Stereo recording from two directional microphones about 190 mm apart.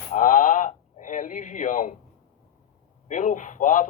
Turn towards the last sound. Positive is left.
turn(degrees=40)  # may be behind; listen again after turning